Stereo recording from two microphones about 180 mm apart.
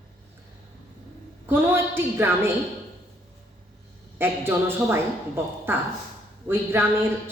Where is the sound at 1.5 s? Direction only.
10° right (ahead or behind).